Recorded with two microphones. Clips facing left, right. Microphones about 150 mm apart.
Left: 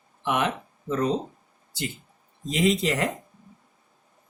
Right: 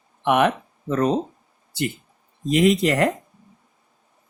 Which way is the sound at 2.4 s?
60° right (ahead or behind).